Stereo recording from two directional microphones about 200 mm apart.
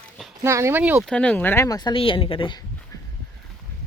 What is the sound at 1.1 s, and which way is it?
Speech, 5° left (ahead or behind).